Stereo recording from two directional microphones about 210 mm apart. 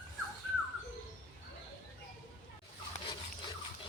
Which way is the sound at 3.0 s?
25° left (ahead or behind).